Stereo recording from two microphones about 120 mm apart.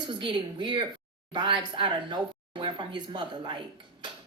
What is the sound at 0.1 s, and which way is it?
A woman's voice, 45° right (ahead or behind).